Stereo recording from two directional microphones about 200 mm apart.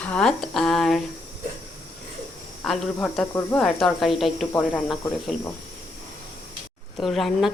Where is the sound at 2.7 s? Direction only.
Centre (ahead or behind).